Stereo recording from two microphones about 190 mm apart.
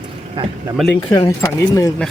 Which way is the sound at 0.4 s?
25° right (ahead or behind).